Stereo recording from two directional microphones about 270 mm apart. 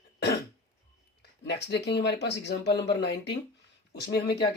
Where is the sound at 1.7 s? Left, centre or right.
Left.